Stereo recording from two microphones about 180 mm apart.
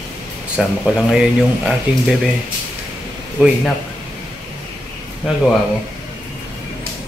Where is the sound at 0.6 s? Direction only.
Centre (ahead or behind).